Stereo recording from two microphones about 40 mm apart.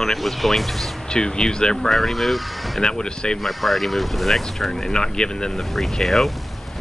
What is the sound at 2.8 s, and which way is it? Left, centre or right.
Speech, centre.